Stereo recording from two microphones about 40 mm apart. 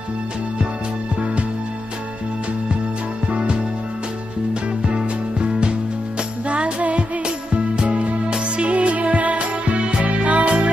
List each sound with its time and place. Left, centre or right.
3.3 s music: right
4.8 s music: right